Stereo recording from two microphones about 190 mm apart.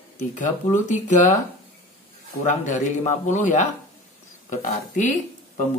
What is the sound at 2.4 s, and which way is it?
Speech, 40° left (ahead or behind).